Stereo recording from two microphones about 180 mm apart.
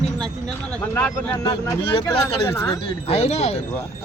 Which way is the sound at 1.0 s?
10° left (ahead or behind).